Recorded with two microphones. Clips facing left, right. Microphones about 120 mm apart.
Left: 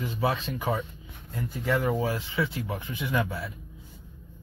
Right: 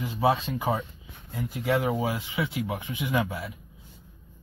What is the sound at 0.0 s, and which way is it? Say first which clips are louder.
Speech: right 4 dB; 20° right (ahead or behind).